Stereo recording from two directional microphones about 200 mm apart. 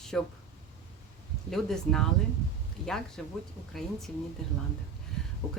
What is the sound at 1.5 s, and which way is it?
Speech, centre (ahead or behind).